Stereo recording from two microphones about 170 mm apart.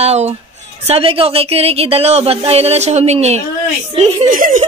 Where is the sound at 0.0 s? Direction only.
40° right (ahead or behind).